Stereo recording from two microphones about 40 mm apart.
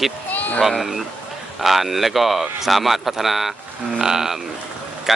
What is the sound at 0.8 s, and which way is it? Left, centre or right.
Speech, centre.